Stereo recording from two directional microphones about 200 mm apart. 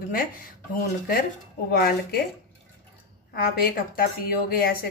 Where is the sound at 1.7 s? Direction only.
50° left (ahead or behind).